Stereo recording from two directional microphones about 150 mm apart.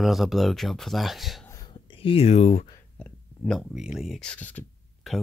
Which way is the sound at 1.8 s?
35° left (ahead or behind).